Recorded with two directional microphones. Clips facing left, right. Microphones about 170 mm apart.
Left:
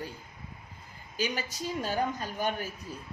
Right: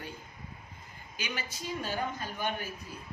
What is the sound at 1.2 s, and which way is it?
A man's voice, 40° left (ahead or behind).